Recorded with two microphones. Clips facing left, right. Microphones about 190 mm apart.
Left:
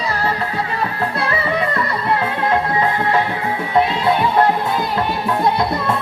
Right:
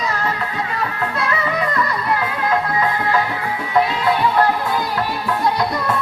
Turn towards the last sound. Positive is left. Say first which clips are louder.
# left 2 dB
turn(degrees=25)  # may be behind; listen again after turning